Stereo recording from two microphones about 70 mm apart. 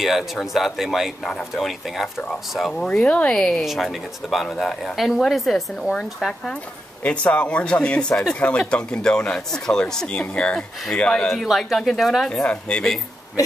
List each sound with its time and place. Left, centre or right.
0.0 s speech: centre
3.0 s speech: centre
3.6 s speech: centre
6.5 s speech: centre
11.3 s speech: centre
12.3 s speech: centre